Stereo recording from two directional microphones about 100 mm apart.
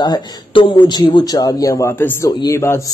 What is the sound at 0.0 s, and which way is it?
Speech, 50° left (ahead or behind).